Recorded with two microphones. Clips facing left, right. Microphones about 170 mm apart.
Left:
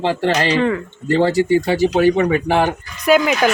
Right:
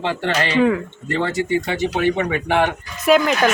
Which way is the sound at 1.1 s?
35° left (ahead or behind).